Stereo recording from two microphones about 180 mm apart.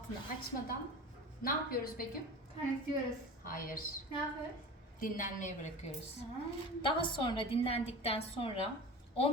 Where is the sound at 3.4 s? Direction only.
50° left (ahead or behind).